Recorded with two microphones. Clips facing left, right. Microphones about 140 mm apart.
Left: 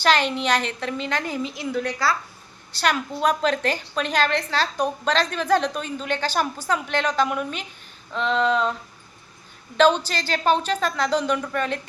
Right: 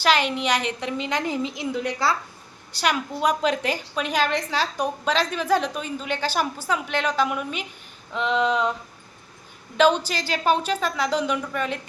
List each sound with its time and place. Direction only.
0.0 s a woman's voice: 10° right (ahead or behind)
9.7 s a woman's voice: 10° right (ahead or behind)